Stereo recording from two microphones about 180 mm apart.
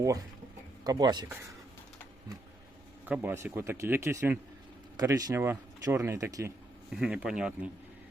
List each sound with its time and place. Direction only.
0.9 s speech: 20° right (ahead or behind)
3.1 s speech: 10° right (ahead or behind)
6.9 s speech: 5° right (ahead or behind)